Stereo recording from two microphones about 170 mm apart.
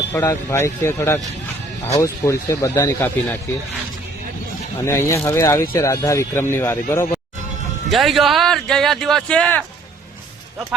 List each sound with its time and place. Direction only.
0.1 s speech: 15° left (ahead or behind)
4.9 s speech: 15° left (ahead or behind)
7.9 s a man's voice: centre (ahead or behind)